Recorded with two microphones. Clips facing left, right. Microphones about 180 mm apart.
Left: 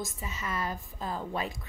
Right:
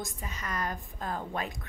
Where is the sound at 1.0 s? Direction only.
50° right (ahead or behind).